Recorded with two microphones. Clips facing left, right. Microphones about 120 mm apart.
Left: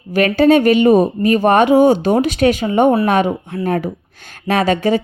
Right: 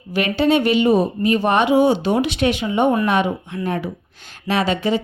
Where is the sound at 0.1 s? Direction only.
45° left (ahead or behind).